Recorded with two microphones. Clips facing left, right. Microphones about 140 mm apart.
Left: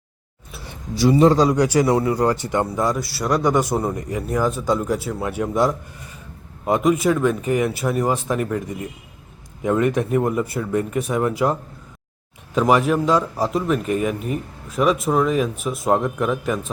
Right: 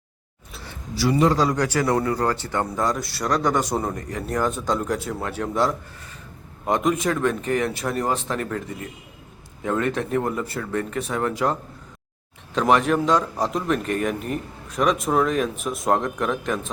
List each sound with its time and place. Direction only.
0.5 s speech: 15° left (ahead or behind)
12.5 s a man's voice: 5° left (ahead or behind)